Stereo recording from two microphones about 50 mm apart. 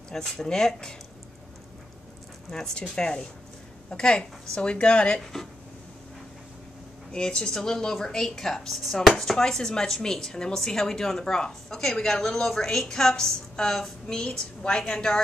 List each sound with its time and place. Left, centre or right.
0.1 s speech: centre
2.5 s speech: centre
5.2 s speech: centre
7.1 s speech: centre